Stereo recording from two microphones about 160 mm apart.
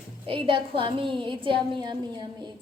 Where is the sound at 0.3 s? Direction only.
35° right (ahead or behind).